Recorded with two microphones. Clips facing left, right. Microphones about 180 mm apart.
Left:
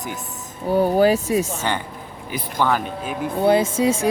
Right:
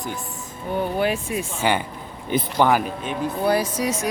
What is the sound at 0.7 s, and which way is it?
Speech, 40° left (ahead or behind).